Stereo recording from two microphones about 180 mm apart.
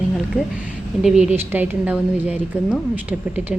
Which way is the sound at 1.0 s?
5° right (ahead or behind).